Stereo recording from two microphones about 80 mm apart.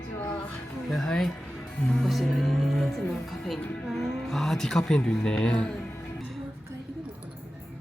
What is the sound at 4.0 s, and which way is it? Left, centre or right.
Speech, centre.